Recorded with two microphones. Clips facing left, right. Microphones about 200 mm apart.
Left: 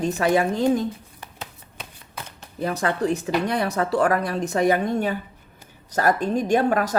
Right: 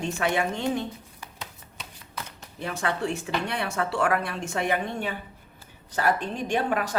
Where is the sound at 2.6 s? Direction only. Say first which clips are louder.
Left 5 dB; 40° left (ahead or behind).